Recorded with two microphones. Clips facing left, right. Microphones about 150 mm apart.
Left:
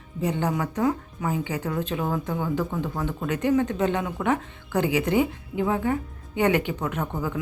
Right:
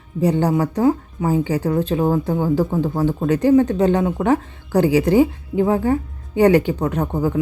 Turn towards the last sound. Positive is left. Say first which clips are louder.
# right 8 dB
turn(degrees=-35)  # may be behind; listen again after turning